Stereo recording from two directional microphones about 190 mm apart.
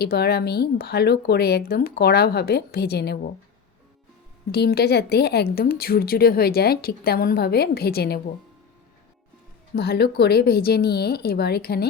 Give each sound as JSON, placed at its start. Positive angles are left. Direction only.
{"t": 0.0, "sound": "a woman's voice", "side_deg": 55}
{"t": 4.5, "sound": "a woman's voice", "side_deg": 55}
{"t": 9.7, "sound": "a woman's voice", "side_deg": 55}